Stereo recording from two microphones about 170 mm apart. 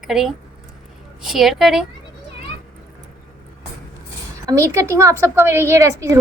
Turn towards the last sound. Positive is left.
turn(degrees=-20)  # may be behind; listen again after turning